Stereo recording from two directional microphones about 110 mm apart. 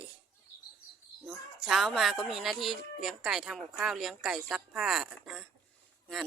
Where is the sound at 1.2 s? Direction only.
Centre (ahead or behind).